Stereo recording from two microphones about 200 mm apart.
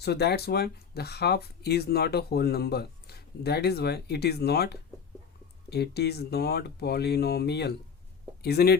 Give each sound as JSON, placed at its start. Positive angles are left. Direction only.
{"t": 0.0, "sound": "speech", "side_deg": 55}